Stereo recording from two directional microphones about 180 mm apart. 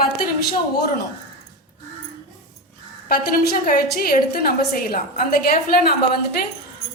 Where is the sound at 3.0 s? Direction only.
55° left (ahead or behind).